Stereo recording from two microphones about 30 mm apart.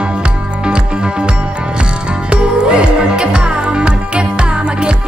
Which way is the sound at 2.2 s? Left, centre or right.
Right.